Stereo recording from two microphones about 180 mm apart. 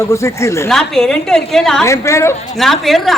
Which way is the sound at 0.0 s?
15° left (ahead or behind).